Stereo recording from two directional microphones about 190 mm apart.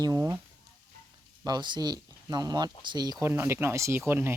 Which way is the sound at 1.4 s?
20° right (ahead or behind).